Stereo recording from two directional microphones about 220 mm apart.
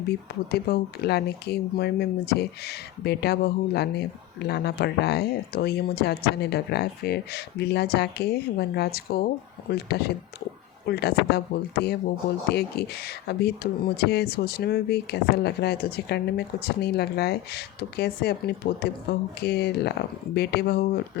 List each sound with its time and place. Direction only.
0.5 s speech: 45° left (ahead or behind)